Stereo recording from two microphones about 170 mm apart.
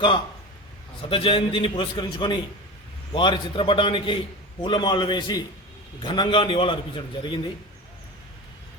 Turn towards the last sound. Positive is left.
turn(degrees=25)  # may be behind; listen again after turning